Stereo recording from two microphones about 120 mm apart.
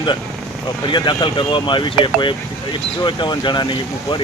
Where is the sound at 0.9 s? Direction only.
40° left (ahead or behind).